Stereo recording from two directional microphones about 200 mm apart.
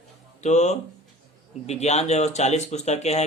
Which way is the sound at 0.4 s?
35° left (ahead or behind).